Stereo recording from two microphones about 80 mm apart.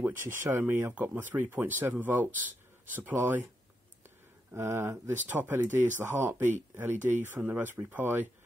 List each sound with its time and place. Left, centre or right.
0.0 s speech: right
4.5 s speech: right